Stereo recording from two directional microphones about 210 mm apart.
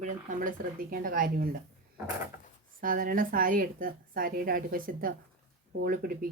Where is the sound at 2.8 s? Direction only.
40° right (ahead or behind).